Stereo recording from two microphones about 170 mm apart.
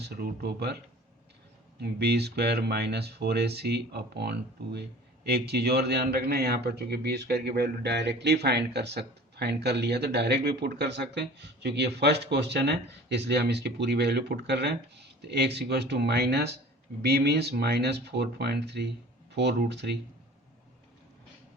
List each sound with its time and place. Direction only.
0.0 s a man's voice: 70° right (ahead or behind)
1.8 s a man's voice: 75° right (ahead or behind)